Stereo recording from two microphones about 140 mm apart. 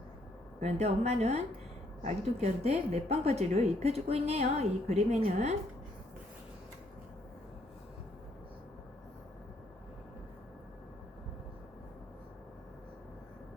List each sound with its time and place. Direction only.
0.6 s a woman's voice: 50° right (ahead or behind)